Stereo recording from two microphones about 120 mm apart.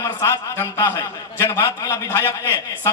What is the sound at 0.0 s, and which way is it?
A man's voice, 25° left (ahead or behind).